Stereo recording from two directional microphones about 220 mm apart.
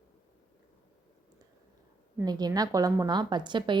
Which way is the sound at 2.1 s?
15° right (ahead or behind).